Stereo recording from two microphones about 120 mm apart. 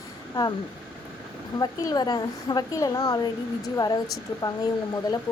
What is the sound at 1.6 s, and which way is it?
A woman's voice, 35° left (ahead or behind).